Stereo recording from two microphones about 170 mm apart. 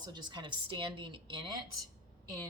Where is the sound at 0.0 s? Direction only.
25° right (ahead or behind).